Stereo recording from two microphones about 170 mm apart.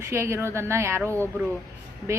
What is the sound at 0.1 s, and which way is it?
A woman's voice, 15° right (ahead or behind).